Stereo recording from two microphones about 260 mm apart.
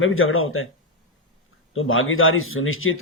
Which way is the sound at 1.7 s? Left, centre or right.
Left.